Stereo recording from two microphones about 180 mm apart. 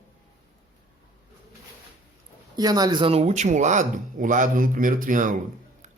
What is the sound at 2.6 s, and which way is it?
Speech, 20° right (ahead or behind).